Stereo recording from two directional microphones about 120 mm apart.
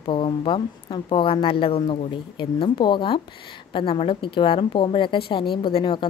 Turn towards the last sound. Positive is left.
turn(degrees=45)  # may be behind; listen again after turning